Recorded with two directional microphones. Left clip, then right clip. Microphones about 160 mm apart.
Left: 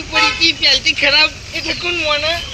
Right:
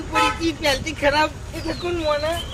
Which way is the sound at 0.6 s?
5° left (ahead or behind).